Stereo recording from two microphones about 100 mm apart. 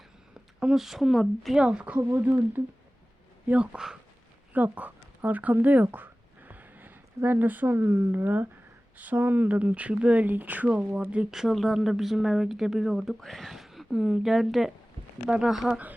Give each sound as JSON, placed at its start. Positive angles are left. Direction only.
{"t": 0.6, "sound": "speech", "side_deg": -5}
{"t": 1.6, "sound": "speech", "side_deg": -10}